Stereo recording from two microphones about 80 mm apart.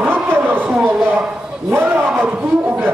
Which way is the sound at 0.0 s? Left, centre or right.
Right.